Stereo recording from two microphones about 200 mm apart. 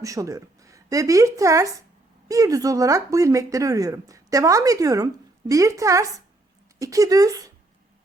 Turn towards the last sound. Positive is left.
turn(degrees=-15)  # may be behind; listen again after turning